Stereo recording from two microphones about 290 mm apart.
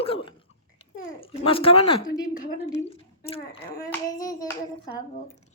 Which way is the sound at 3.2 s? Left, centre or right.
Centre.